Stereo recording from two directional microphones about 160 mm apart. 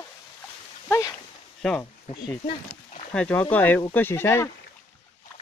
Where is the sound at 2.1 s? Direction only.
45° left (ahead or behind).